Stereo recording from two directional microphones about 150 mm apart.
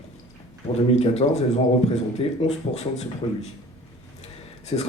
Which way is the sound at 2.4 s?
45° left (ahead or behind).